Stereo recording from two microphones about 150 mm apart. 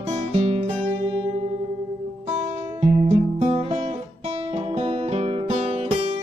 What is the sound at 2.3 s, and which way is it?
Music, 45° right (ahead or behind).